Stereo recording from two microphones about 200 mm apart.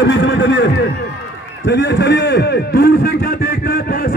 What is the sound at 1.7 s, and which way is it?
A man's voice, 60° left (ahead or behind).